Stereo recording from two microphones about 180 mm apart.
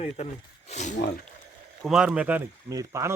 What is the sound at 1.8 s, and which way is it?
Speech, 5° right (ahead or behind).